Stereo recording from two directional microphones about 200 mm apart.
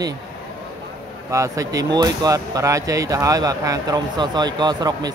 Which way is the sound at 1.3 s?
15° right (ahead or behind).